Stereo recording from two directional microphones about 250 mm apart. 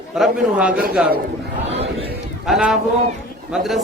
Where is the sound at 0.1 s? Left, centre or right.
Centre.